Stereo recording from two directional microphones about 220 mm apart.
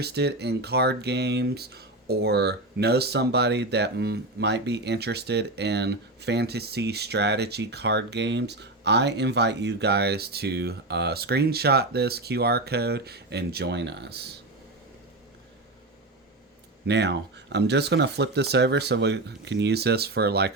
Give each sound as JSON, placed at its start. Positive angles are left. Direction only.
{"t": 0.0, "sound": "speech", "side_deg": -50}
{"t": 16.8, "sound": "speech", "side_deg": -50}